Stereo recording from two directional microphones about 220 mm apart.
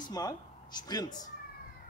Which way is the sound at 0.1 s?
15° left (ahead or behind).